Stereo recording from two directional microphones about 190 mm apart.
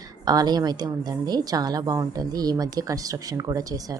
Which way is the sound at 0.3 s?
20° right (ahead or behind).